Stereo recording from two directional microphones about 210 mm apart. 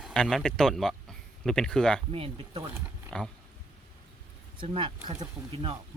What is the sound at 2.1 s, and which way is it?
Speech, 25° right (ahead or behind).